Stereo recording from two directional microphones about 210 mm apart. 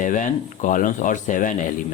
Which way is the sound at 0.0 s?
35° left (ahead or behind).